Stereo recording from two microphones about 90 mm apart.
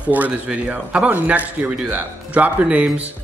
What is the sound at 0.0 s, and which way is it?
A man's voice, 15° right (ahead or behind).